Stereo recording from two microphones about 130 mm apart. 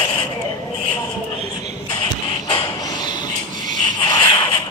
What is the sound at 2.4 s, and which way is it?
Mechanisms, 35° left (ahead or behind).